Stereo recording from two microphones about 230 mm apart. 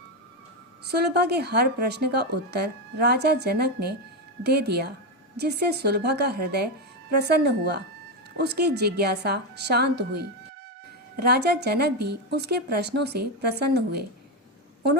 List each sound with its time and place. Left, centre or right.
0.9 s speech: right